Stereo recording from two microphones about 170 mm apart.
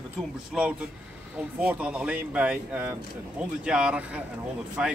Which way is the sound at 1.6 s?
10° right (ahead or behind).